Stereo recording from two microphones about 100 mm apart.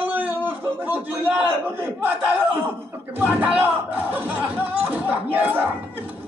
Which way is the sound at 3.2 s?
10° right (ahead or behind).